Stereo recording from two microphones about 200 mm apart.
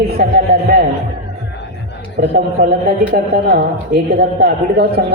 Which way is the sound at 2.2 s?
50° right (ahead or behind).